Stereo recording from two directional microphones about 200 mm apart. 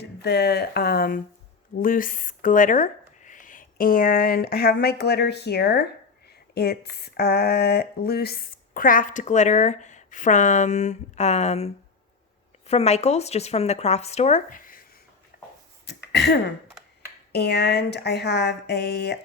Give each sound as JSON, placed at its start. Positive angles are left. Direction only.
{"t": 0.0, "sound": "speech", "side_deg": 55}
{"t": 15.3, "sound": "a sound", "side_deg": 45}
{"t": 15.9, "sound": "throat clearing", "side_deg": 55}
{"t": 17.3, "sound": "speech", "side_deg": 55}